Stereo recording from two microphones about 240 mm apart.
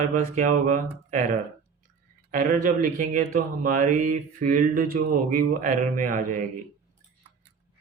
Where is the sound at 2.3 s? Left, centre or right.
Right.